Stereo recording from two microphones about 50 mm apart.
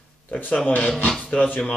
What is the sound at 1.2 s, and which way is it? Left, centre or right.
Music, left.